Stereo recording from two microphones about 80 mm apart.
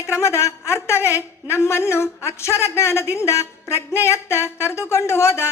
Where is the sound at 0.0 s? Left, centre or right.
Left.